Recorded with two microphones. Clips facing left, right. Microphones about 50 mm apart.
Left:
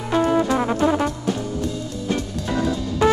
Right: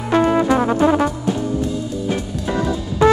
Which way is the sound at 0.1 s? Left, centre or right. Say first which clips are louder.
Right 3 dB; right.